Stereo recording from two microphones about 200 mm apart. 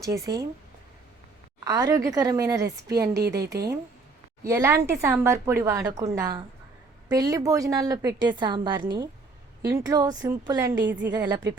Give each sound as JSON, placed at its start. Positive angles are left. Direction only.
{"t": 0.0, "sound": "a woman's voice", "side_deg": -20}
{"t": 1.6, "sound": "a woman's voice", "side_deg": -15}
{"t": 3.4, "sound": "speech", "side_deg": -55}
{"t": 4.4, "sound": "a woman's voice", "side_deg": -15}
{"t": 10.8, "sound": "speech", "side_deg": -60}
{"t": 11.1, "sound": "a woman's voice", "side_deg": -20}